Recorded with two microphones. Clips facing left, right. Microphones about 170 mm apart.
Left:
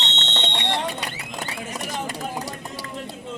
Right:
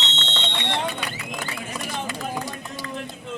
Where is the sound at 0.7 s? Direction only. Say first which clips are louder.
Right 1 dB; 35° left (ahead or behind).